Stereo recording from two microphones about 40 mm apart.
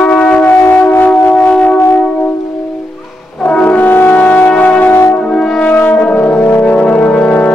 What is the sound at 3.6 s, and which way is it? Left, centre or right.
French horn, left.